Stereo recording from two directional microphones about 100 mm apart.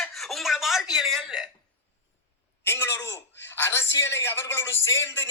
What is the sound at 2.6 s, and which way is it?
A man's voice, 25° left (ahead or behind).